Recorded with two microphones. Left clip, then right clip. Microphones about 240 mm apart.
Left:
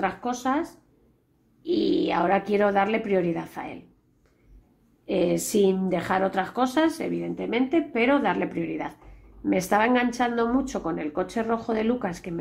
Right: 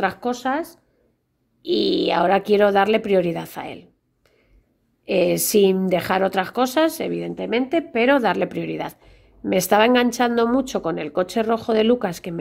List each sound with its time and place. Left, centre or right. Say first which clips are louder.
0.0 s a woman's voice: right 4 dB; right
5.0 s a woman's voice: right 5 dB; right